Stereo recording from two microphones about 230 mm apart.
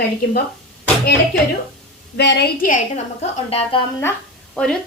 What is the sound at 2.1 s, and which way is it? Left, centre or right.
Speech, left.